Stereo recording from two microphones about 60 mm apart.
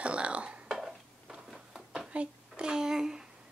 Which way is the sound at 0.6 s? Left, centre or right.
Centre.